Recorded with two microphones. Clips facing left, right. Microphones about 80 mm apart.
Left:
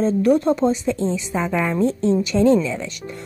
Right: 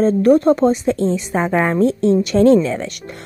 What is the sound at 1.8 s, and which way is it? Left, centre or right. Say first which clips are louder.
A woman's voice: right 3 dB; right.